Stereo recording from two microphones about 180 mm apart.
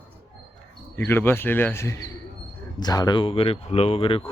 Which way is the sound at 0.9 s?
10° left (ahead or behind).